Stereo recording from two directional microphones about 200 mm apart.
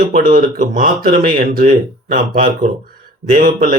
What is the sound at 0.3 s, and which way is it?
Speech, 45° right (ahead or behind).